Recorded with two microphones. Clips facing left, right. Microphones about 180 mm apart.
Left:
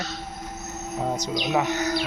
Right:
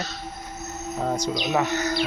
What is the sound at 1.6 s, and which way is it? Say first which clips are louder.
Bird: left 1 dB; 15° left (ahead or behind).